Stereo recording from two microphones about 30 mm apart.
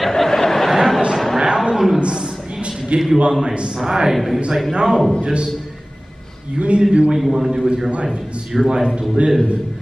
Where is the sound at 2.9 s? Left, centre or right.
Right.